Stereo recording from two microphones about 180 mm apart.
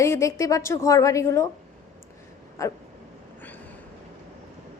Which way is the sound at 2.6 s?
15° left (ahead or behind).